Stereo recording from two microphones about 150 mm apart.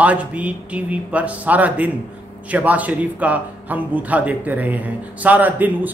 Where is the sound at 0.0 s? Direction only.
10° right (ahead or behind).